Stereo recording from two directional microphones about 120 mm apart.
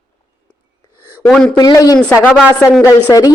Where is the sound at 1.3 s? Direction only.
5° left (ahead or behind).